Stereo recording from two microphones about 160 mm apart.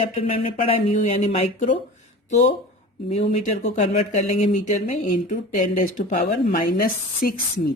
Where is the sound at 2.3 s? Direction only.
50° left (ahead or behind).